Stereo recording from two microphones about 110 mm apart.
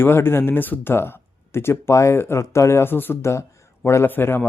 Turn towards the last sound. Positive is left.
turn(degrees=20)  # may be behind; listen again after turning